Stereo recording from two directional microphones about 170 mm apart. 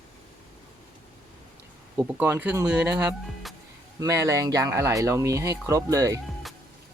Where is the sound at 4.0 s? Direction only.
20° right (ahead or behind).